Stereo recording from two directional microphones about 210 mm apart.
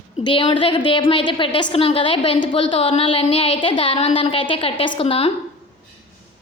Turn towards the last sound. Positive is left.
turn(degrees=25)  # may be behind; listen again after turning